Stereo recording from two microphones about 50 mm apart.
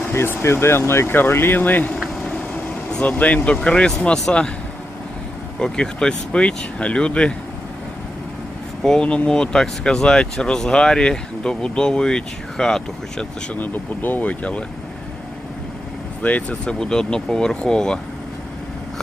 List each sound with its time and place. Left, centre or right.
0.3 s speech: left
3.0 s speech: left
5.5 s speech: centre
8.8 s speech: centre
13.5 s speech: left
16.2 s speech: left
16.6 s speech: centre